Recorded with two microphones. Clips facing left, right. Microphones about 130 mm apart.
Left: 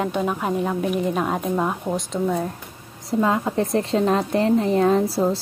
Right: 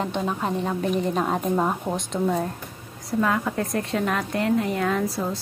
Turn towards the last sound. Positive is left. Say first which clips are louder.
# left 6 dB
turn(degrees=30)  # may be behind; listen again after turning